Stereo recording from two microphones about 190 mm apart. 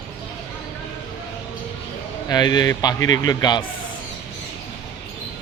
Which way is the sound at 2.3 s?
20° left (ahead or behind).